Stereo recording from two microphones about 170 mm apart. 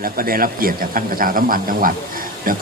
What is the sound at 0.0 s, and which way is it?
Speech, 60° right (ahead or behind).